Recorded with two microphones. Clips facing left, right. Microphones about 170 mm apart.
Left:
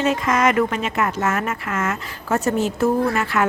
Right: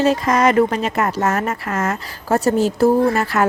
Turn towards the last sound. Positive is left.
turn(degrees=-40)  # may be behind; listen again after turning